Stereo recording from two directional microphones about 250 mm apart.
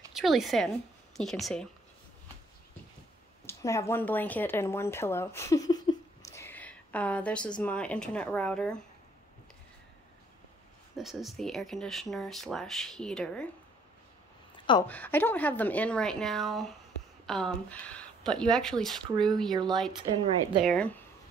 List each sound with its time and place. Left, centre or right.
0.1 s speech: centre
3.4 s speech: centre
11.0 s speech: centre
14.7 s a woman's voice: centre
20.6 s speech: centre